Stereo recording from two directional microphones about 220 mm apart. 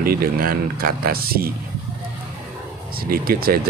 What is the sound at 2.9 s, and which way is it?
Speech, 40° right (ahead or behind).